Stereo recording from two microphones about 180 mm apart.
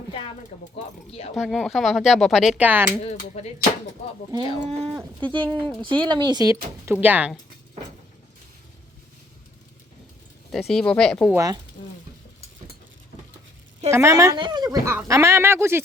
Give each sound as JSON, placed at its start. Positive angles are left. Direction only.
{"t": 1.4, "sound": "speech", "side_deg": 0}
{"t": 3.4, "sound": "speech", "side_deg": 35}
{"t": 4.3, "sound": "speech", "side_deg": -20}
{"t": 5.4, "sound": "speech", "side_deg": 10}
{"t": 5.6, "sound": "speech", "side_deg": -25}
{"t": 10.5, "sound": "speech", "side_deg": 0}
{"t": 11.3, "sound": "speech", "side_deg": -20}
{"t": 13.9, "sound": "a woman's voice", "side_deg": -15}